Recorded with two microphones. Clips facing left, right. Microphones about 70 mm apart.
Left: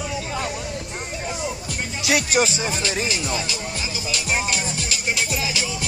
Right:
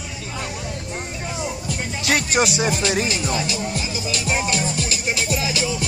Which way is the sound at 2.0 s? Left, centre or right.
Right.